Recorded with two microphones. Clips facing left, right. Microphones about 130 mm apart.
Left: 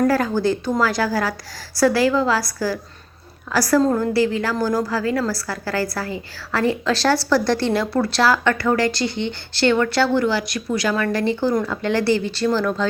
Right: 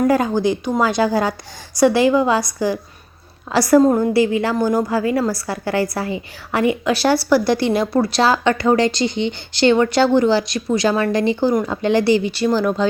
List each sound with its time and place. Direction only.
0.1 s a woman's voice: 20° right (ahead or behind)